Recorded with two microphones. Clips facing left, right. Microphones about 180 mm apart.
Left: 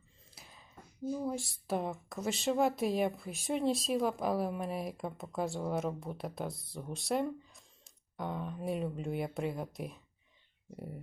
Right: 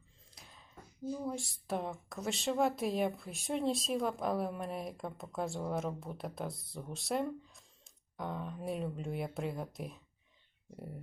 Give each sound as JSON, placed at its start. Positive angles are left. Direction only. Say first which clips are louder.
{"t": 0.3, "sound": "a sound", "louder": "left 1 dB", "side_deg": 5}
{"t": 1.0, "sound": "speech", "louder": "left 3 dB", "side_deg": 15}
{"t": 1.3, "sound": "a woman's voice", "louder": "left 2 dB", "side_deg": 0}